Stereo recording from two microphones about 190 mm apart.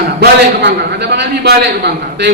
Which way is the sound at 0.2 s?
60° right (ahead or behind).